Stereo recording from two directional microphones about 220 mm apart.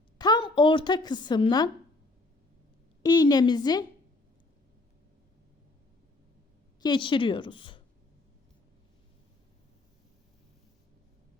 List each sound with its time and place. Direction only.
0.2 s a woman's voice: 20° left (ahead or behind)
3.0 s speech: 20° left (ahead or behind)
6.8 s speech: 20° left (ahead or behind)